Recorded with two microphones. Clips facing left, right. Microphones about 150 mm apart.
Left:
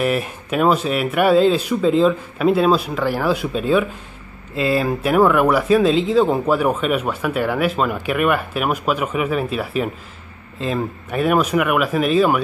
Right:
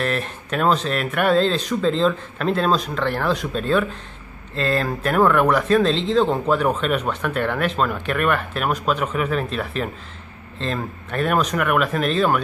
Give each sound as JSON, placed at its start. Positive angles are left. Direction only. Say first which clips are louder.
{"t": 0.0, "sound": "speech", "louder": "left 4 dB", "side_deg": 10}